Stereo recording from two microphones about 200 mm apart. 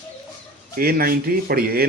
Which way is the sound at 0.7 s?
50° right (ahead or behind).